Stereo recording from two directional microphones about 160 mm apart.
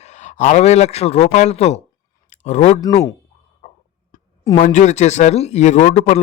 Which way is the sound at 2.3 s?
45° left (ahead or behind).